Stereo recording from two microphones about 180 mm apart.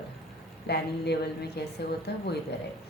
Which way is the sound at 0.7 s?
65° left (ahead or behind).